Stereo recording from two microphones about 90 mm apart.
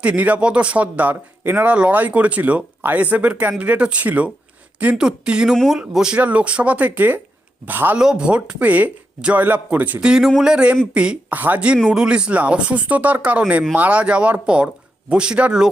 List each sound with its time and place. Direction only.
0.0 s speech: 15° right (ahead or behind)
7.9 s speech: 10° right (ahead or behind)